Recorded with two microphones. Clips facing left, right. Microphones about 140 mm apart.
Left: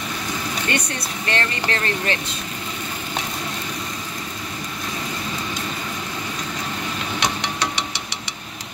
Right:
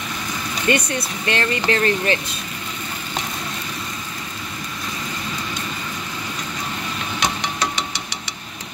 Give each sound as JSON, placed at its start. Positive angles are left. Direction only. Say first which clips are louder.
{"t": 0.7, "sound": "speech", "louder": "right 8 dB", "side_deg": -20}